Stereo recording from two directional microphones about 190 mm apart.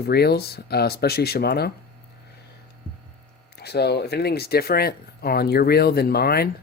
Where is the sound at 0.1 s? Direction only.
55° left (ahead or behind).